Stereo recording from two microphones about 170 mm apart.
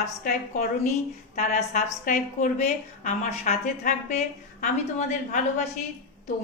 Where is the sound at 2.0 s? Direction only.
50° left (ahead or behind).